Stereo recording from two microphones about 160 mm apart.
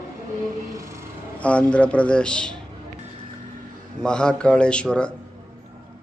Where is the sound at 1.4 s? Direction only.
10° left (ahead or behind).